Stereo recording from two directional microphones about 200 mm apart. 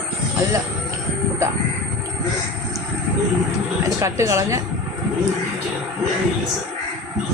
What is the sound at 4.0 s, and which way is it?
Speech, 15° right (ahead or behind).